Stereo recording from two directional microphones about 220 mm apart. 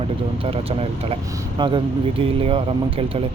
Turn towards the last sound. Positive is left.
turn(degrees=-25)  # may be behind; listen again after turning